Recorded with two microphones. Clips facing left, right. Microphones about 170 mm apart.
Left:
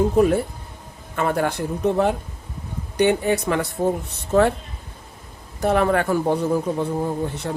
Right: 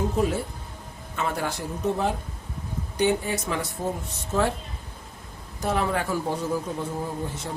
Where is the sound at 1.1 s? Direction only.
55° left (ahead or behind).